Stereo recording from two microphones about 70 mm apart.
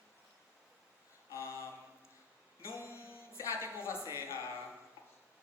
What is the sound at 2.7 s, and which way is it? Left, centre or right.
Music, left.